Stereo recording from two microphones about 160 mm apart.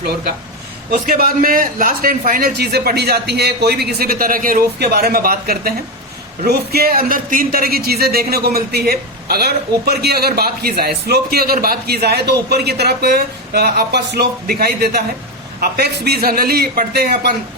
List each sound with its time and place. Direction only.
0.9 s a man's voice: 65° right (ahead or behind)